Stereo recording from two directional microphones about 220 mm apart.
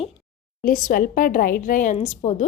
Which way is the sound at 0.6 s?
40° left (ahead or behind).